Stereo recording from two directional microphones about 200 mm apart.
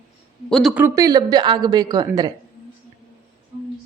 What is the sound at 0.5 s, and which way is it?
Speech, 5° right (ahead or behind).